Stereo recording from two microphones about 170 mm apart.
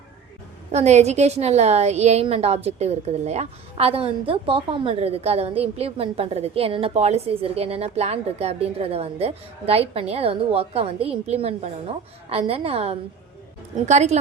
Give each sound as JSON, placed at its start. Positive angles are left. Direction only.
{"t": 0.7, "sound": "a woman's voice", "side_deg": -40}